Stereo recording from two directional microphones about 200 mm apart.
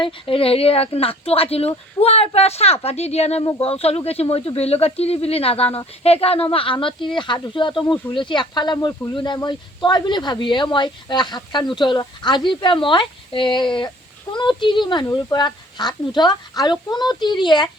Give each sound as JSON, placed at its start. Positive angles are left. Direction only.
{"t": 0.0, "sound": "speech", "side_deg": 25}